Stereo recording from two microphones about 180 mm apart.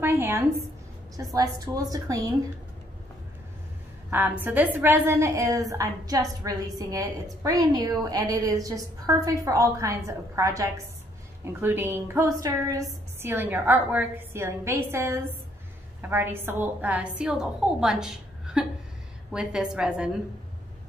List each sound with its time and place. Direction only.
0.0 s a woman's voice: 15° right (ahead or behind)
4.1 s a woman's voice: 10° right (ahead or behind)